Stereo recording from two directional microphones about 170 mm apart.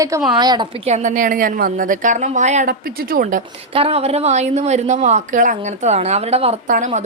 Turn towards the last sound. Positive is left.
turn(degrees=-45)  # may be behind; listen again after turning